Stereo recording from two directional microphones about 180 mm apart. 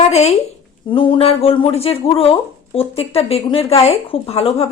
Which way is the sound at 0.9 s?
30° left (ahead or behind).